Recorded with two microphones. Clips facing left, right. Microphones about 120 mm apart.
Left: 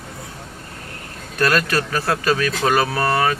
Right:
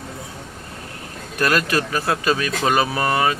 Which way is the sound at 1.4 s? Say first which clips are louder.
Left 1 dB; 15° right (ahead or behind).